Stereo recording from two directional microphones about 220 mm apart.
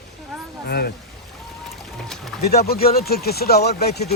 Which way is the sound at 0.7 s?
45° left (ahead or behind).